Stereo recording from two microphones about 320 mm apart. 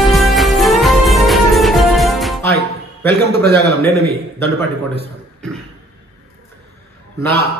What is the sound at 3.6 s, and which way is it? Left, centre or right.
Speech, centre.